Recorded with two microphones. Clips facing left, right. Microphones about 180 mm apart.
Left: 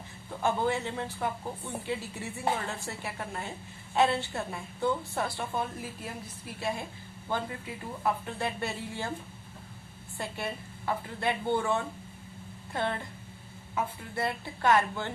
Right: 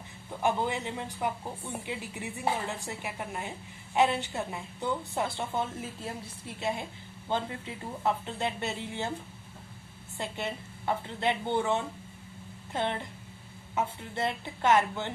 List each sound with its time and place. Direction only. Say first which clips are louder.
0.4 s a woman's voice: left 1 dB; 15° right (ahead or behind)
10.2 s a woman's voice: right 1 dB; 20° right (ahead or behind)